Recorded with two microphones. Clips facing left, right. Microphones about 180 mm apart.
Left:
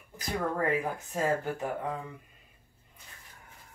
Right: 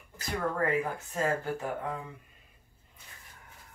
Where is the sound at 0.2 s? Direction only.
15° left (ahead or behind).